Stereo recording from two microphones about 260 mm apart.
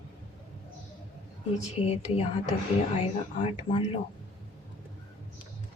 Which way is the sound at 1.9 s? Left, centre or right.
Left.